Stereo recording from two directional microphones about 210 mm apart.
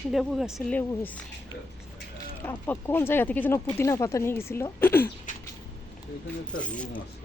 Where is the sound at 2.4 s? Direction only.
10° left (ahead or behind).